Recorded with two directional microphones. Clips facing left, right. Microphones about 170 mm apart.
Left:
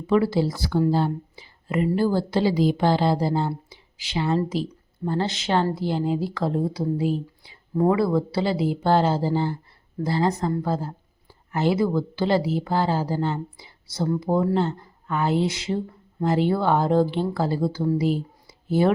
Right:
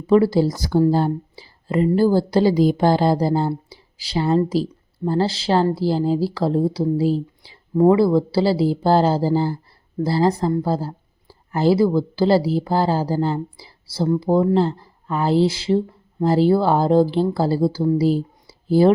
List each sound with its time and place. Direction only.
0.1 s speech: 40° right (ahead or behind)